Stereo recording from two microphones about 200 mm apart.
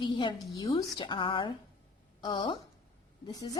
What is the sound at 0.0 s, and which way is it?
Speech, 25° left (ahead or behind).